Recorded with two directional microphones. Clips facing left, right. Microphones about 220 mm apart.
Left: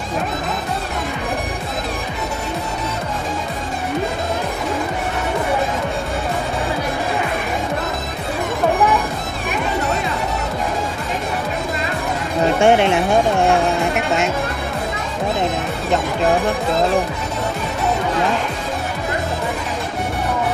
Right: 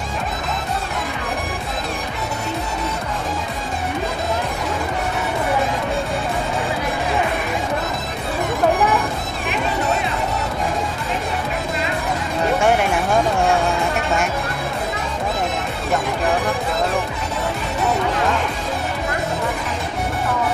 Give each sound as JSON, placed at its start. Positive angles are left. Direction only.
{"t": 12.6, "sound": "speech", "side_deg": 25}